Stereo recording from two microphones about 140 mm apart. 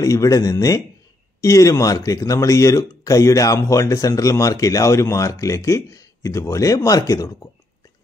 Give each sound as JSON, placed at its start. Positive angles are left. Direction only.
{"t": 0.0, "sound": "speech", "side_deg": 25}